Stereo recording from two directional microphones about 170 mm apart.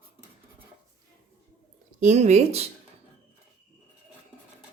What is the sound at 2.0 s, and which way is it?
Speech, 40° right (ahead or behind).